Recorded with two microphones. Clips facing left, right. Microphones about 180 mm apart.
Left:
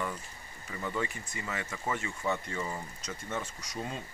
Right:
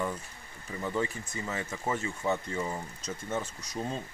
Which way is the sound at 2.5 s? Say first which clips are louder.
Right 3 dB; 20° right (ahead or behind).